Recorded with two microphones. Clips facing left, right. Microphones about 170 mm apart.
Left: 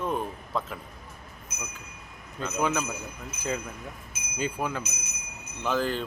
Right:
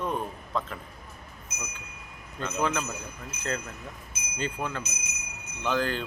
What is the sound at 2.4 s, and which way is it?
Speech, 5° left (ahead or behind).